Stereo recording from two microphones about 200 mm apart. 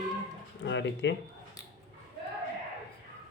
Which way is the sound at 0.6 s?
60° left (ahead or behind).